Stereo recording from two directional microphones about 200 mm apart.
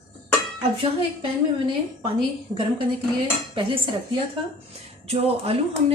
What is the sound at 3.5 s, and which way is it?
Cutlery, 25° right (ahead or behind).